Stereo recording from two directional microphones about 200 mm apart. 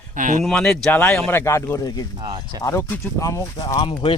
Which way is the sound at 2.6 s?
15° left (ahead or behind).